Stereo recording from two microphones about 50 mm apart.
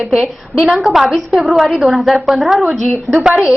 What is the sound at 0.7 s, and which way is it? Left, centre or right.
A woman's voice, centre.